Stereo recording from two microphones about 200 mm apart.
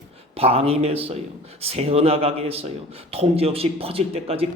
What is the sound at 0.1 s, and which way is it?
A man's voice, 30° right (ahead or behind).